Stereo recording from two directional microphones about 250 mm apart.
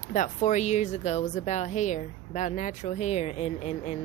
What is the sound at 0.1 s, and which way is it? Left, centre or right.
Speech, left.